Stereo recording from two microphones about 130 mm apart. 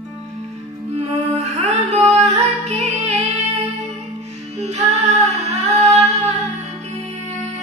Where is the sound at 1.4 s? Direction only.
60° right (ahead or behind).